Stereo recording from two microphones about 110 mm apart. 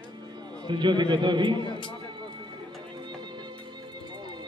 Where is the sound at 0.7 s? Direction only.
45° right (ahead or behind).